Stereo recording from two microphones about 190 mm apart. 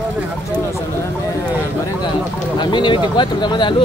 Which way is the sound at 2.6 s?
25° left (ahead or behind).